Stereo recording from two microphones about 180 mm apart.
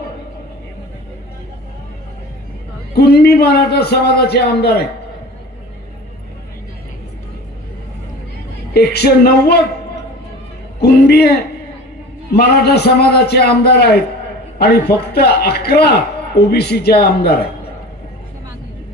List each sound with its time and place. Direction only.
2.9 s a man's voice: 65° left (ahead or behind)
8.7 s a man's voice: 60° left (ahead or behind)
10.8 s a man's voice: 65° left (ahead or behind)